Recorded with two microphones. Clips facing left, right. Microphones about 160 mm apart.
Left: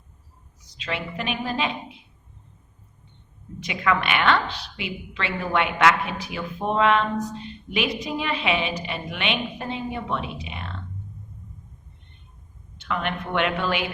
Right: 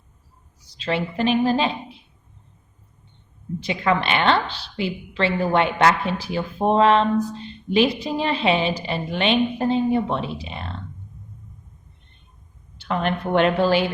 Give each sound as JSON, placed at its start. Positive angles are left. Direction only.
{"t": 0.6, "sound": "a woman's voice", "side_deg": -30}
{"t": 3.6, "sound": "a woman's voice", "side_deg": -30}
{"t": 12.7, "sound": "a woman's voice", "side_deg": -35}